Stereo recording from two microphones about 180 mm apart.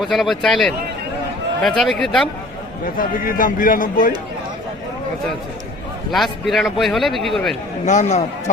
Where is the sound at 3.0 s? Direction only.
50° left (ahead or behind).